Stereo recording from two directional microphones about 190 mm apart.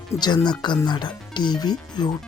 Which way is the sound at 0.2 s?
20° left (ahead or behind).